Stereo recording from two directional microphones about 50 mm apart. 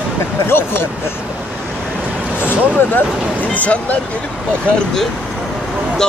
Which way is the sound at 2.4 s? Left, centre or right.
Left.